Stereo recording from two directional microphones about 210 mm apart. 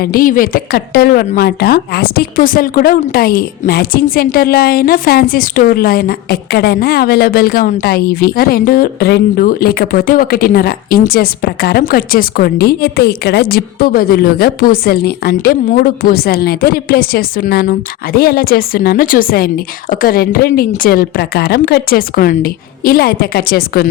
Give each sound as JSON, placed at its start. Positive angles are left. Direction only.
{"t": 0.0, "sound": "a woman's voice", "side_deg": 45}